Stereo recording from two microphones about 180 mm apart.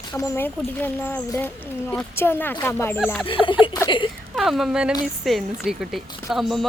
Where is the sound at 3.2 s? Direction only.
30° left (ahead or behind).